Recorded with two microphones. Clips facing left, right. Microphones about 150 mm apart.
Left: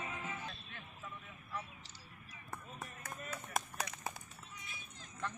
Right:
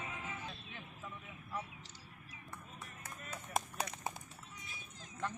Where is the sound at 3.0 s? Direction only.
25° right (ahead or behind).